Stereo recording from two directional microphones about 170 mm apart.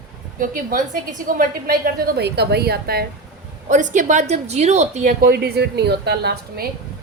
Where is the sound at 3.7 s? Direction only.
45° right (ahead or behind).